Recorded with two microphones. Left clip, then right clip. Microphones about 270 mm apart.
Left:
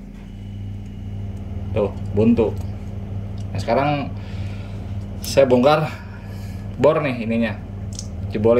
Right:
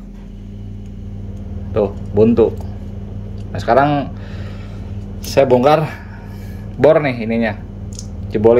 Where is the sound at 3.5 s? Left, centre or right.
Centre.